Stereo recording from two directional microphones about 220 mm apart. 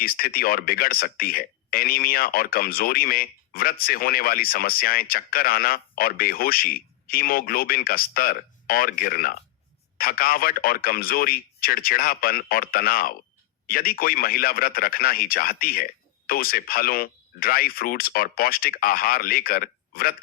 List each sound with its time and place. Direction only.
0.0 s speech: 40° left (ahead or behind)